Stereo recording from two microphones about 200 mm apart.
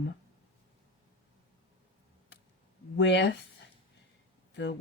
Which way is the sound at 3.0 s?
65° left (ahead or behind).